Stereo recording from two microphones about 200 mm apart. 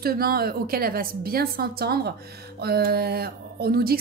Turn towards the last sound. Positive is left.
turn(degrees=-50)  # may be behind; listen again after turning